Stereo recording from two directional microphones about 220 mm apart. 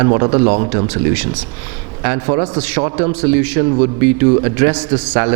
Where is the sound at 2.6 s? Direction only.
10° right (ahead or behind).